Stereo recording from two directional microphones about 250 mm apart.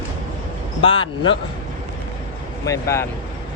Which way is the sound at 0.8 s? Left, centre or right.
Centre.